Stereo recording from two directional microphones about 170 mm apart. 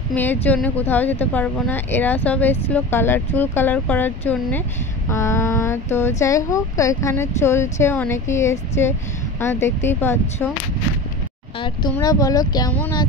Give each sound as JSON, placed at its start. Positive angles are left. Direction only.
{"t": 0.1, "sound": "speech", "side_deg": 10}
{"t": 12.0, "sound": "speech", "side_deg": 20}